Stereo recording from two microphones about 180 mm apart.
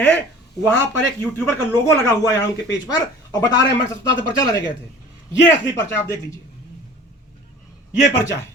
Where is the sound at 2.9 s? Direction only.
25° left (ahead or behind).